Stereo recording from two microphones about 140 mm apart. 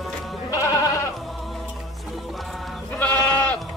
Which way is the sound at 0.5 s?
25° left (ahead or behind).